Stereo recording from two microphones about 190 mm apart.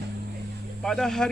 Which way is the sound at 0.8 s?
5° left (ahead or behind).